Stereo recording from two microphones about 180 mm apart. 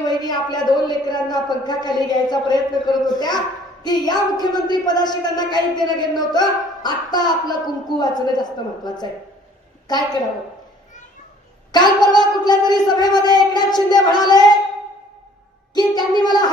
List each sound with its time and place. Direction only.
0.0 s a woman's voice: 20° left (ahead or behind)
11.7 s a woman's voice: 25° left (ahead or behind)
15.7 s a woman's voice: 20° left (ahead or behind)